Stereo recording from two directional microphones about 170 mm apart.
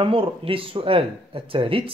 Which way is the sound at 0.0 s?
30° right (ahead or behind).